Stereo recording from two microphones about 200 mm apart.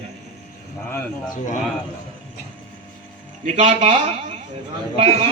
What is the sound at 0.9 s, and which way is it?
Speech, 10° left (ahead or behind).